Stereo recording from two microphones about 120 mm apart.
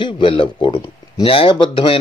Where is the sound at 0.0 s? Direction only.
45° left (ahead or behind).